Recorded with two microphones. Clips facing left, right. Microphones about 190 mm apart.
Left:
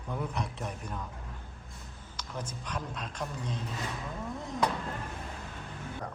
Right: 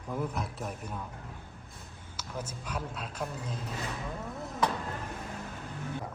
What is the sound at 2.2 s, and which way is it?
Speech, 10° right (ahead or behind).